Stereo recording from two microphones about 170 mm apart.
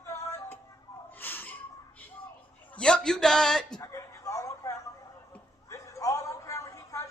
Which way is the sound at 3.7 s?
20° left (ahead or behind).